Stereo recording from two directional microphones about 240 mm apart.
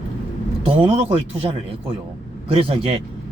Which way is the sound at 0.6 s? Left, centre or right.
Right.